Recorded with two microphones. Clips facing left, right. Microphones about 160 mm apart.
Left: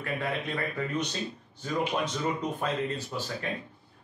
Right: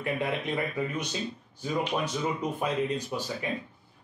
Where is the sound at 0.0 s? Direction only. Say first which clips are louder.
Right 2 dB; 15° right (ahead or behind).